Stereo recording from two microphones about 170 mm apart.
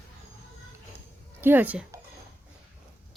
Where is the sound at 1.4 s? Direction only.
10° right (ahead or behind).